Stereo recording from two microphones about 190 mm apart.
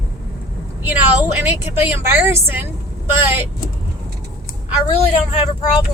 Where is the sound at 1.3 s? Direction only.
10° right (ahead or behind).